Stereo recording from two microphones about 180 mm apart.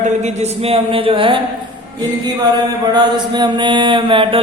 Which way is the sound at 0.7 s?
30° right (ahead or behind).